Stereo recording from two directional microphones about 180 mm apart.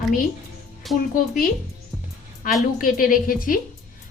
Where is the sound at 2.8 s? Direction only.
50° left (ahead or behind).